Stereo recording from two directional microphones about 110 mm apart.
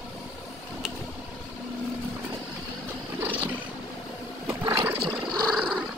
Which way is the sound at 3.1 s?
15° right (ahead or behind).